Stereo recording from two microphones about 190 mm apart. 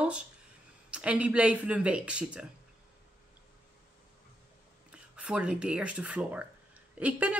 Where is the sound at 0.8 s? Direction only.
5° right (ahead or behind).